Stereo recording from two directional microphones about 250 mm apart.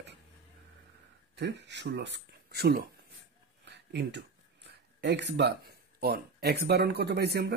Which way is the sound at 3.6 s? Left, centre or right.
Right.